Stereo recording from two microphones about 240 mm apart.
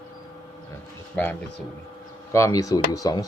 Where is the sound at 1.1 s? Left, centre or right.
Centre.